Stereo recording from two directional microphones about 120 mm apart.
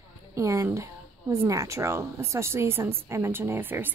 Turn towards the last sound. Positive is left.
turn(degrees=-15)  # may be behind; listen again after turning